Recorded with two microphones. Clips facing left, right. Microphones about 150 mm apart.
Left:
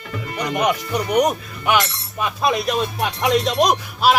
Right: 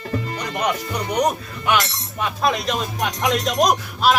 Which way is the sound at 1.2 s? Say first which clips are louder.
Left 1 dB; 10° left (ahead or behind).